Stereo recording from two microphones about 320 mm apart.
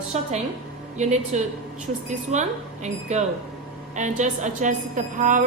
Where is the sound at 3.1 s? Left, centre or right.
Centre.